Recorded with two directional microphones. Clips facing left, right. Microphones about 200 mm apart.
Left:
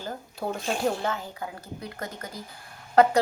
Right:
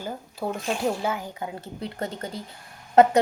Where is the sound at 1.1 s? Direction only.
15° right (ahead or behind).